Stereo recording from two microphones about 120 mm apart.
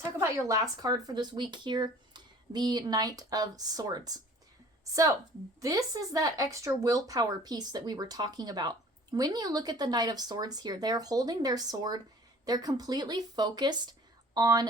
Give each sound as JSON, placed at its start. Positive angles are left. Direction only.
{"t": 0.0, "sound": "a woman's voice", "side_deg": -25}